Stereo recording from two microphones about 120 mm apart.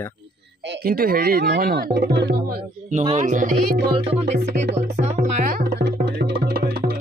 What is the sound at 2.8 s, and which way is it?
Speech, 90° right.